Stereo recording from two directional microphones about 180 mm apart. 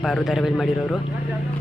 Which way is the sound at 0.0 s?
Centre (ahead or behind).